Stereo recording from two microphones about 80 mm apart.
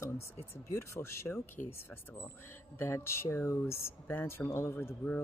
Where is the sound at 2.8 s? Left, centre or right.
Left.